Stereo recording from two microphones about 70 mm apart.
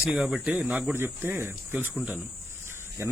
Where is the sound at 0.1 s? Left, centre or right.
Centre.